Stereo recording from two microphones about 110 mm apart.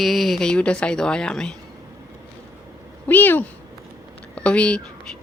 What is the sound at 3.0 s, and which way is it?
Speech, 15° left (ahead or behind).